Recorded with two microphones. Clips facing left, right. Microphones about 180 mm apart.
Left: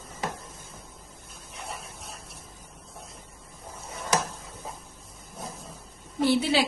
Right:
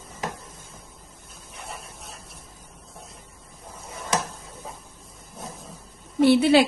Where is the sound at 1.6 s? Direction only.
Centre (ahead or behind).